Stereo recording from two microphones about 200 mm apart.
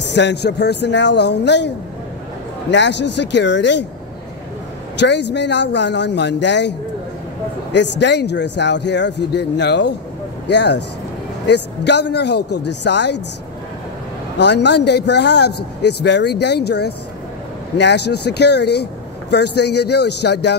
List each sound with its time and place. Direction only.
0.1 s a man's voice: 60° left (ahead or behind)
2.7 s a man's voice: 60° left (ahead or behind)
4.9 s a man's voice: 60° left (ahead or behind)
7.7 s a man's voice: 60° left (ahead or behind)
14.4 s a man's voice: 60° left (ahead or behind)